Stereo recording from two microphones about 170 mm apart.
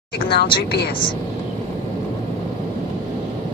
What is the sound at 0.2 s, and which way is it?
Speech, 70° left (ahead or behind).